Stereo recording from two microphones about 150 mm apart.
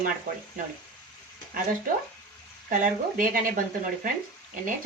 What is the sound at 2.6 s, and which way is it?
Speech, 65° right (ahead or behind).